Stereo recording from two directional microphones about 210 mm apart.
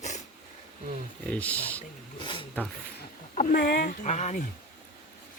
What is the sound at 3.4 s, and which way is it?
Speech, 40° left (ahead or behind).